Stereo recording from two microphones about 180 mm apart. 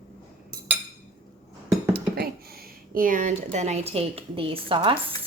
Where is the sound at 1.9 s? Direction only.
60° right (ahead or behind).